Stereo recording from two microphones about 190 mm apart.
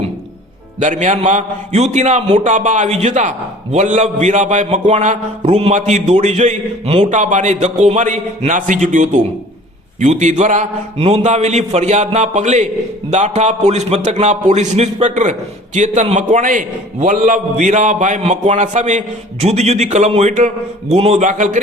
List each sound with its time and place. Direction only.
0.8 s a man's voice: 40° right (ahead or behind)